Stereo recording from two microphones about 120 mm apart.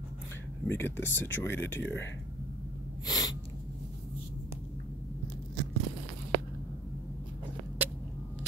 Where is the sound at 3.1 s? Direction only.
35° left (ahead or behind).